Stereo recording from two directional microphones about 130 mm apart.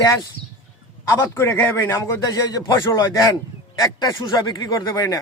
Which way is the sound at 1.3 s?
20° left (ahead or behind).